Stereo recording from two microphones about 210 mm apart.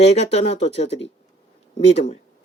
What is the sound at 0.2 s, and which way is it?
Speech, 30° left (ahead or behind).